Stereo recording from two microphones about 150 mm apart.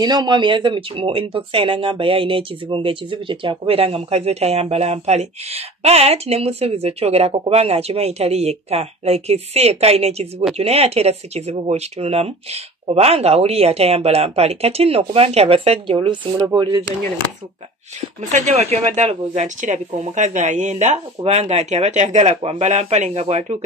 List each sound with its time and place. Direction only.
0.0 s speech: 30° right (ahead or behind)
18.3 s speech: 50° right (ahead or behind)